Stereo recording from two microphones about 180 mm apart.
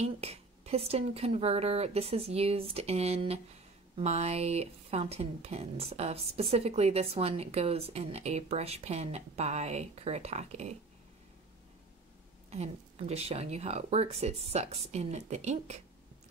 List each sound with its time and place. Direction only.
0.0 s speech: 35° right (ahead or behind)
12.4 s speech: 35° right (ahead or behind)